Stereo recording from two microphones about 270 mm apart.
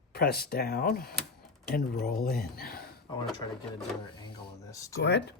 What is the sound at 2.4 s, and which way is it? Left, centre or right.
Speech, left.